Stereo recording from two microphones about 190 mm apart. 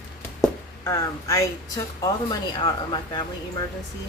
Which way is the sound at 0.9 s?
15° left (ahead or behind).